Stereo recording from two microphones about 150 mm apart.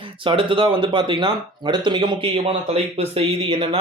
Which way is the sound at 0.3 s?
35° right (ahead or behind).